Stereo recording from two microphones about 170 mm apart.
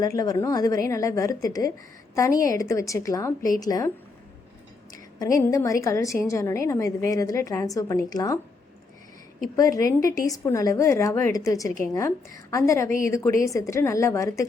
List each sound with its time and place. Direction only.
0.0 s a woman's voice: 20° left (ahead or behind)
5.2 s a woman's voice: 20° left (ahead or behind)
9.6 s a woman's voice: 20° left (ahead or behind)